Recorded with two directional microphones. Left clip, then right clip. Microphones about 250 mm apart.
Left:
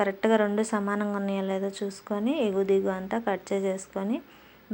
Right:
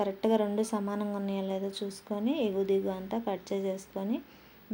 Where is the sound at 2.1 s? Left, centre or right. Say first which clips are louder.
Left 4 dB; centre.